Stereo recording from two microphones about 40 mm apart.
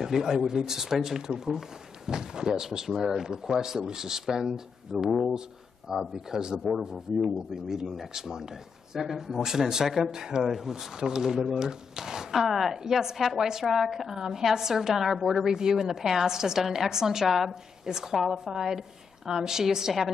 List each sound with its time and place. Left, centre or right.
0.0 s a woman's voice: centre
6.1 s a woman's voice: centre